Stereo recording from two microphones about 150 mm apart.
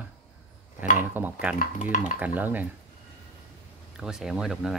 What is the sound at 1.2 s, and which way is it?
Speech, 15° right (ahead or behind).